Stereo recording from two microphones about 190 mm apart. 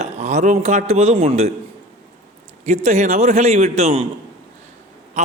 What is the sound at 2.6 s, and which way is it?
A man's voice, 35° right (ahead or behind).